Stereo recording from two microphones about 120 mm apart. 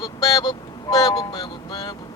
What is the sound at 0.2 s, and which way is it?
Speech, 30° left (ahead or behind).